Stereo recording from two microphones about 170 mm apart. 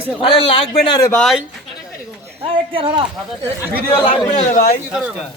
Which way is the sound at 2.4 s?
30° right (ahead or behind).